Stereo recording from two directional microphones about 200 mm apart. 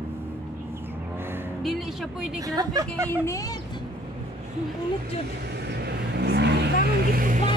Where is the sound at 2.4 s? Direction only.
20° right (ahead or behind).